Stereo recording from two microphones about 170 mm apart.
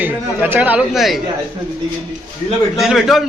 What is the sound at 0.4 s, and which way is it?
Speech, 10° right (ahead or behind).